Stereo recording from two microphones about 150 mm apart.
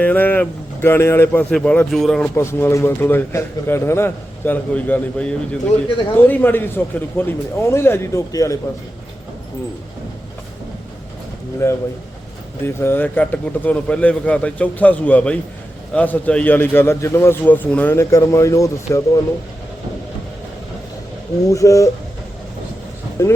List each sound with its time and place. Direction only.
0.0 s a man's voice: 10° left (ahead or behind)
2.3 s a man's voice: 15° left (ahead or behind)
11.6 s a man's voice: 15° left (ahead or behind)
21.4 s speech: 20° left (ahead or behind)
23.2 s a man's voice: 15° left (ahead or behind)